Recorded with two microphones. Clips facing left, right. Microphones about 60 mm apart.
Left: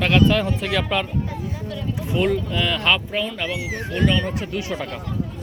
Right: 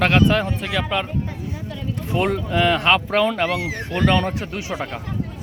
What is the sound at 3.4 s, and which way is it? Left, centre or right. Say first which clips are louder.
Speech: right 4 dB; right.